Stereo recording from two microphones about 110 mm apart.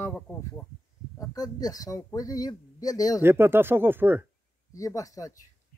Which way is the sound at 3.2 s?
20° right (ahead or behind).